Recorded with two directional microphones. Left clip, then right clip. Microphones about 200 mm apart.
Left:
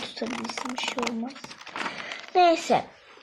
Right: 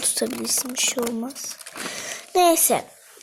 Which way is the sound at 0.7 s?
Centre (ahead or behind).